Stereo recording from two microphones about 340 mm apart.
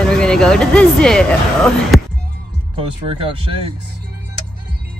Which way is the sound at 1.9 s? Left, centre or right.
Centre.